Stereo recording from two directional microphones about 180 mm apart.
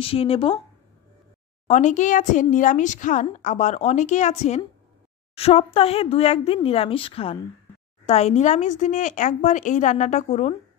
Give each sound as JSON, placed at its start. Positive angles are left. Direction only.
{"t": 0.0, "sound": "speech", "side_deg": 30}
{"t": 1.7, "sound": "speech", "side_deg": 40}